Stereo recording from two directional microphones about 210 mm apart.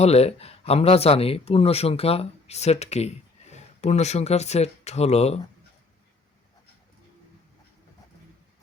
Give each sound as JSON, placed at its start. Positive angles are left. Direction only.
{"t": 0.0, "sound": "speech", "side_deg": 30}